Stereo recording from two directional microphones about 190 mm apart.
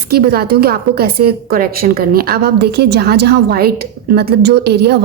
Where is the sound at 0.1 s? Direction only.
55° right (ahead or behind).